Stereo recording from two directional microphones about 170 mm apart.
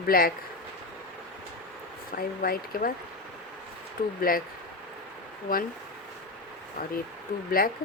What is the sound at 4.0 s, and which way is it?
Speech, 55° left (ahead or behind).